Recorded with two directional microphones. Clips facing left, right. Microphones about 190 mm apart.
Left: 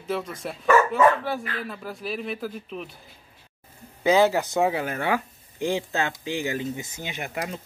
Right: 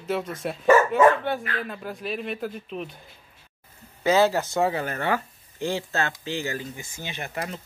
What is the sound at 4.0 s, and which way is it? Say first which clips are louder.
Speech: left 1 dB; 15° left (ahead or behind).